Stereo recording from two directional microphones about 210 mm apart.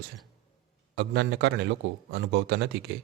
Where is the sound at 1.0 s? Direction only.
55° right (ahead or behind).